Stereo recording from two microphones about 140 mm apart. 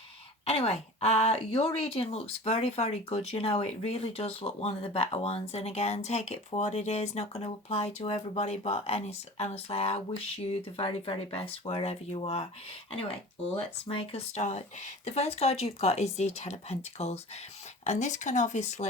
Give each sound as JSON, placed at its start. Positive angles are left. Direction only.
{"t": 0.4, "sound": "speech", "side_deg": 45}